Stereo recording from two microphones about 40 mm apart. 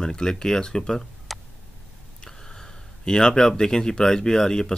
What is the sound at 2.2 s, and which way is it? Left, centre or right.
Speech, centre.